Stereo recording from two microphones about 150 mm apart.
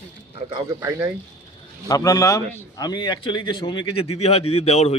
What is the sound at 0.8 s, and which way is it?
Speech, 20° right (ahead or behind).